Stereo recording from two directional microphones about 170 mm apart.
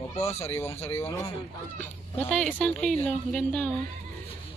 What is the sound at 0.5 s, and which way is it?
Speech, 15° left (ahead or behind).